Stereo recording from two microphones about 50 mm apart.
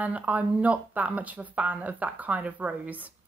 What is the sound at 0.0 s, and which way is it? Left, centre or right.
A woman's voice, right.